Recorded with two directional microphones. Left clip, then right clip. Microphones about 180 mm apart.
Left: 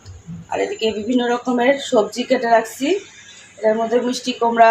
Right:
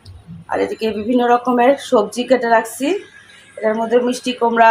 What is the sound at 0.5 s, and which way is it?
A woman's voice, 25° right (ahead or behind).